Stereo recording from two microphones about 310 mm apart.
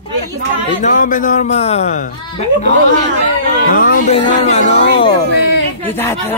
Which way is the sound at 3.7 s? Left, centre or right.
Left.